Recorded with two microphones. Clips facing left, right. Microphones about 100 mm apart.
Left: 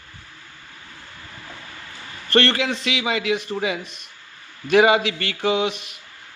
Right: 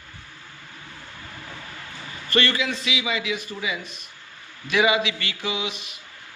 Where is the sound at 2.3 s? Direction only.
55° left (ahead or behind).